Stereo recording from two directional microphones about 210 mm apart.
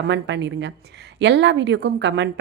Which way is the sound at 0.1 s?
55° right (ahead or behind).